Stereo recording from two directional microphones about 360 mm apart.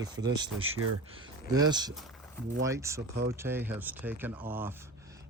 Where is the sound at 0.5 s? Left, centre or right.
Right.